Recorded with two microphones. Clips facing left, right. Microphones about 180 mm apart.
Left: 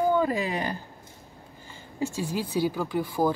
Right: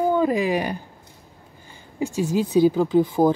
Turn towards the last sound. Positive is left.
turn(degrees=-20)  # may be behind; listen again after turning